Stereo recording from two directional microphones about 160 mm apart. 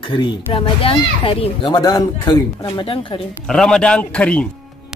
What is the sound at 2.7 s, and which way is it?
Speech, 35° left (ahead or behind).